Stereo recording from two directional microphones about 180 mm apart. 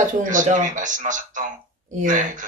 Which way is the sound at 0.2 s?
45° right (ahead or behind).